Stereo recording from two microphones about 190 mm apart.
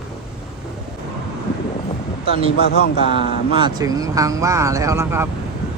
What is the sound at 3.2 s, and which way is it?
Speech, 25° right (ahead or behind).